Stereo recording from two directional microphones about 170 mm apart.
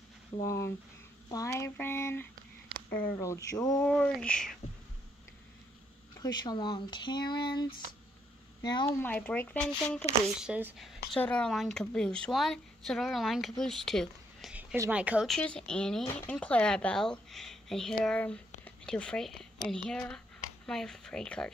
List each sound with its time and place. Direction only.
0.4 s speech: 15° left (ahead or behind)
3.8 s speech: 5° left (ahead or behind)
6.1 s speech: 25° left (ahead or behind)
8.6 s speech: 25° left (ahead or behind)
9.0 s speech: 10° left (ahead or behind)
10.2 s speech: 5° right (ahead or behind)
11.1 s speech: 5° left (ahead or behind)